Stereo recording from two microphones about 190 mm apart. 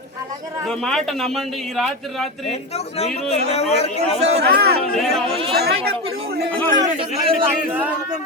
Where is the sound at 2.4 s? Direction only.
35° left (ahead or behind).